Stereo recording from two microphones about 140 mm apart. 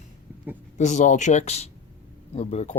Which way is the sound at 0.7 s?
60° left (ahead or behind).